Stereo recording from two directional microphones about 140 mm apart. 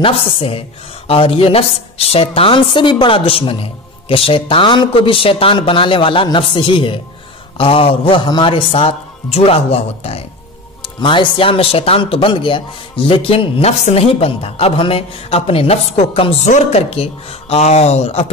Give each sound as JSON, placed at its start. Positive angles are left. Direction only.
{"t": 0.0, "sound": "speech", "side_deg": 40}
{"t": 10.8, "sound": "speech", "side_deg": 35}